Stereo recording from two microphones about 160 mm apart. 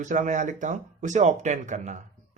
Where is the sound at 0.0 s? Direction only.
50° right (ahead or behind).